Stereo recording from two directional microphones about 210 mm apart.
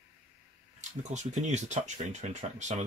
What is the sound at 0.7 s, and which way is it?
Speech, 35° right (ahead or behind).